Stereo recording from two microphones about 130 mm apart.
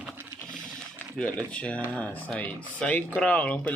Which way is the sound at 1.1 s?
10° left (ahead or behind).